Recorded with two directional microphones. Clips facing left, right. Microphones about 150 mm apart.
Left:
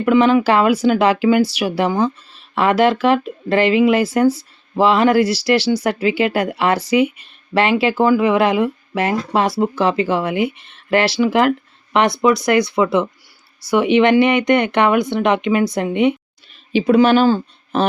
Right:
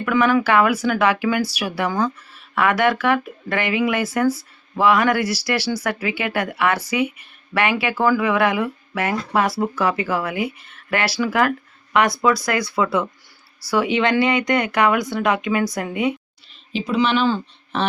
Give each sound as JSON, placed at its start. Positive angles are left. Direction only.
{"t": 0.0, "sound": "speech", "side_deg": 25}
{"t": 16.7, "sound": "speech", "side_deg": 60}